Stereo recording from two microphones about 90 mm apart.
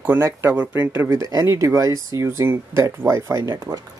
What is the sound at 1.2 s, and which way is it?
Speech, 45° right (ahead or behind).